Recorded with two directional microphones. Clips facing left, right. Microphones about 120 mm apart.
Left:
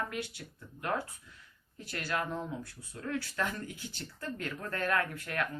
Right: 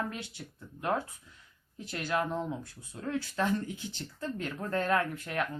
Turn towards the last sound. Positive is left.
turn(degrees=-20)  # may be behind; listen again after turning